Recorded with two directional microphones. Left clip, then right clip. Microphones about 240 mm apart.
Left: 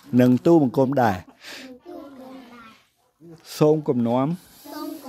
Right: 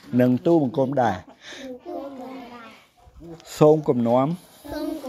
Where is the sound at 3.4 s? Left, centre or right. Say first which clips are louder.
Right 3 dB; left.